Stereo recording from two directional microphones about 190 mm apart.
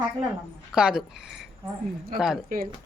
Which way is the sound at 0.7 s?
5° right (ahead or behind).